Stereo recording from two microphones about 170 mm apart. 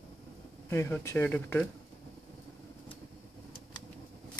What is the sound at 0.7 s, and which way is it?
Speech, 15° left (ahead or behind).